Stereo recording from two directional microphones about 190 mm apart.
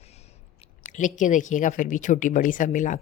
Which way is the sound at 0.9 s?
40° left (ahead or behind).